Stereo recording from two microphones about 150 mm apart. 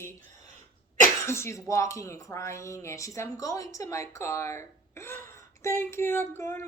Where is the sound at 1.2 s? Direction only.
20° left (ahead or behind).